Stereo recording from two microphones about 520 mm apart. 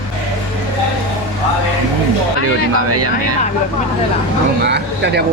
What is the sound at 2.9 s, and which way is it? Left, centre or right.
Speech, right.